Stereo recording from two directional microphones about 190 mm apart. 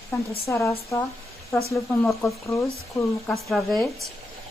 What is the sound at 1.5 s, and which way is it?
Speech, centre (ahead or behind).